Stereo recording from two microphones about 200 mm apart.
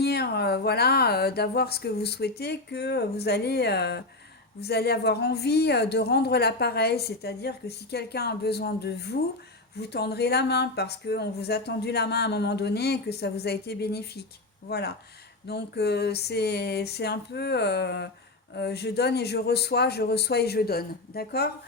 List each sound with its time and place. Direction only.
0.0 s speech: 55° left (ahead or behind)